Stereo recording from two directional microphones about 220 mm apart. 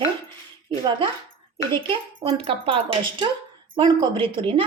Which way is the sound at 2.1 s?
25° right (ahead or behind).